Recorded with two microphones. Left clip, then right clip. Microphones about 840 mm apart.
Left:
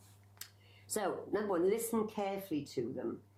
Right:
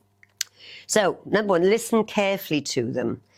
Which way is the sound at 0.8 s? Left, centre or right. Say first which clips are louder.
Right 16 dB; right.